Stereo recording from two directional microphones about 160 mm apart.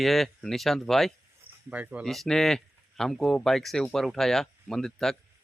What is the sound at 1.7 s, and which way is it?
Speech, 10° right (ahead or behind).